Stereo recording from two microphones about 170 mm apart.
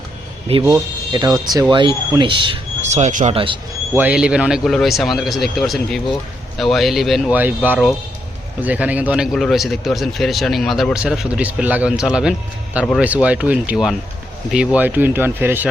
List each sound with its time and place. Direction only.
0.5 s speech: 35° right (ahead or behind)
1.1 s speech: 25° right (ahead or behind)
2.9 s speech: 45° right (ahead or behind)
3.3 s speech: 30° right (ahead or behind)
3.9 s speech: 10° right (ahead or behind)